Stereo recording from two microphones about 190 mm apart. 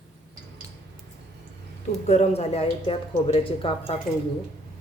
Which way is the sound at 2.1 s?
35° left (ahead or behind).